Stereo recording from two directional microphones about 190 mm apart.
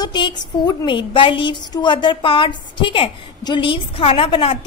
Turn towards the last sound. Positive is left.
turn(degrees=30)  # may be behind; listen again after turning